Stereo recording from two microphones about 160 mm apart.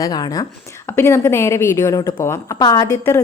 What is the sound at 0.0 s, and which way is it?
A woman's voice, 25° left (ahead or behind).